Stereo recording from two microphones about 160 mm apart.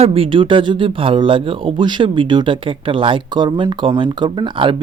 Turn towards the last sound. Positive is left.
turn(degrees=-30)  # may be behind; listen again after turning